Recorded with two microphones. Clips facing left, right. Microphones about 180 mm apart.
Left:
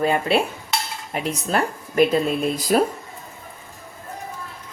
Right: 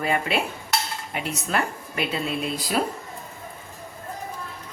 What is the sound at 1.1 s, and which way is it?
Speech, 35° left (ahead or behind).